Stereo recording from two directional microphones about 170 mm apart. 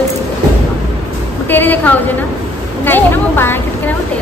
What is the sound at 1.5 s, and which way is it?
A woman's voice, 10° left (ahead or behind).